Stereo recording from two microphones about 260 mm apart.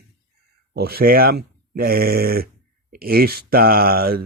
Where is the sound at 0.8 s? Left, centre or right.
Right.